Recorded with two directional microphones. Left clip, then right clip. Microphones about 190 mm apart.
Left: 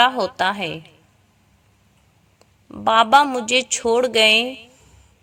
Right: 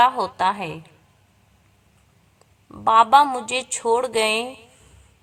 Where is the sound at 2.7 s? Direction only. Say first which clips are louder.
Even; 20° left (ahead or behind).